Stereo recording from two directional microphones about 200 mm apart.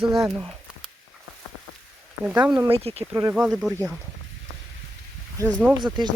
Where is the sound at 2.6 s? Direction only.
30° right (ahead or behind).